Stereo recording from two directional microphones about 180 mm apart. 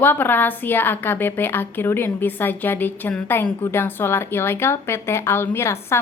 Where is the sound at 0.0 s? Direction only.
10° left (ahead or behind).